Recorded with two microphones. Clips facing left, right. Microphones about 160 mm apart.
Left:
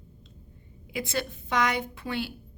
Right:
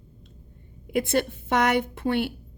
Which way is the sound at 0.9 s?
55° right (ahead or behind).